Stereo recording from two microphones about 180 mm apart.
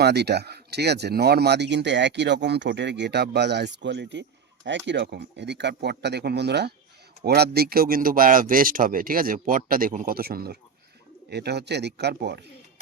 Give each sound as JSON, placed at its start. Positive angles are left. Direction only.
{"t": 0.0, "sound": "speech", "side_deg": -65}